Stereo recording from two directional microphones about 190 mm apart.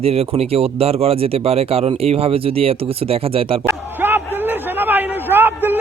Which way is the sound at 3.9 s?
10° right (ahead or behind).